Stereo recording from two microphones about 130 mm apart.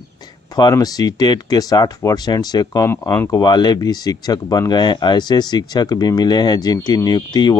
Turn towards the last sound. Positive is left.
turn(degrees=30)  # may be behind; listen again after turning